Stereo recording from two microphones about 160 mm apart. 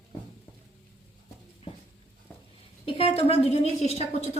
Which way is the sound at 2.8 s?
35° left (ahead or behind).